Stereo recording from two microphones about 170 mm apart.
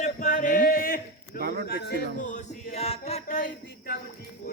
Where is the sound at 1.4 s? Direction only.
65° right (ahead or behind).